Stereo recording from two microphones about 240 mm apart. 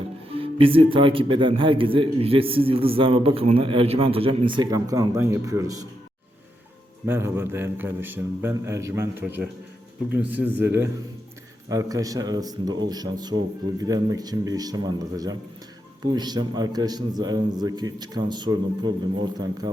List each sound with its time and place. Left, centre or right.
0.3 s speech: right
7.0 s a man's voice: centre